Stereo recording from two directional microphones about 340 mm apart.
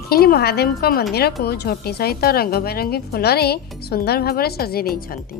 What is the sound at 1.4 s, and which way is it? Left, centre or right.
A woman's voice, left.